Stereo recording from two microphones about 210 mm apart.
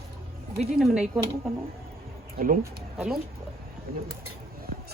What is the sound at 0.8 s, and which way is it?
Speech, 5° right (ahead or behind).